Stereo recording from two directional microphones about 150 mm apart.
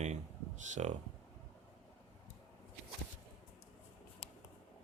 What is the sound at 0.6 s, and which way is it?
Speech, 55° right (ahead or behind).